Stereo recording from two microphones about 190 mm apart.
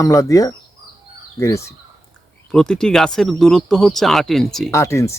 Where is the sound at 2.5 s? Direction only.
5° left (ahead or behind).